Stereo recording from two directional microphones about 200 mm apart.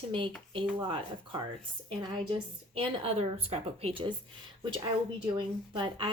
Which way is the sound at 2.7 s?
25° right (ahead or behind).